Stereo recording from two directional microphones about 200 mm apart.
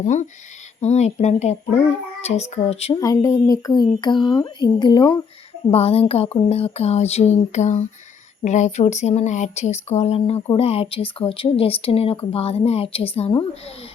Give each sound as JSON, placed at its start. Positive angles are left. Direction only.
{"t": 0.0, "sound": "speech", "side_deg": 35}
{"t": 3.0, "sound": "speech", "side_deg": 15}